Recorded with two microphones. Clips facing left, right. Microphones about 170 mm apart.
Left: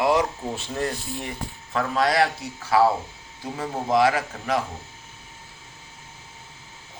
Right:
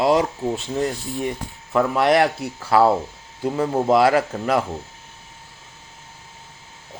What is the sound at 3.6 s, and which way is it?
Speech, 65° right (ahead or behind).